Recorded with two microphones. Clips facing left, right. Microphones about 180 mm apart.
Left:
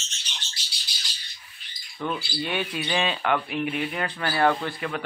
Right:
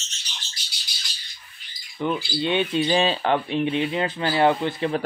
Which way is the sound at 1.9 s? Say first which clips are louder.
Right 5 dB; 10° right (ahead or behind).